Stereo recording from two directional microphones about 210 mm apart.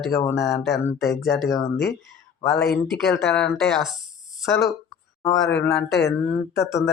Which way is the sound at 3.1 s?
5° left (ahead or behind).